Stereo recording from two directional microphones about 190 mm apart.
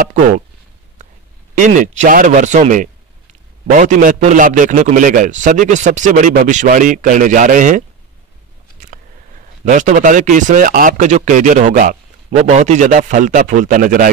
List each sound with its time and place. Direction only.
1.5 s speech: 40° right (ahead or behind)
9.7 s speech: 40° right (ahead or behind)